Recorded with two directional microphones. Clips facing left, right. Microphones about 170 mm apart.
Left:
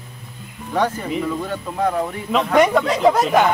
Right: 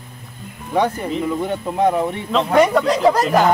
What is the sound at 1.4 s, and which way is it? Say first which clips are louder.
Speech: right 4 dB; 20° right (ahead or behind).